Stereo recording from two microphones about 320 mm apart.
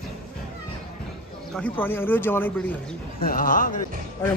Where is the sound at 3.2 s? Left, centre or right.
Left.